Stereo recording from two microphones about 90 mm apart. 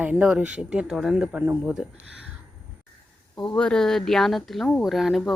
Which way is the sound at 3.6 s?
10° left (ahead or behind).